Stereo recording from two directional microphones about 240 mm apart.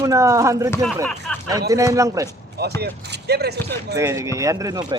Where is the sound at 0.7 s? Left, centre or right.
Centre.